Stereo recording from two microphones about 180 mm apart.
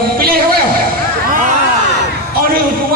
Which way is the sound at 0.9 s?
55° right (ahead or behind).